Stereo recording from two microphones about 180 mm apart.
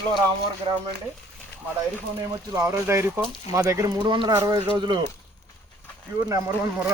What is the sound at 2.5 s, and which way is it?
Speech, 15° right (ahead or behind).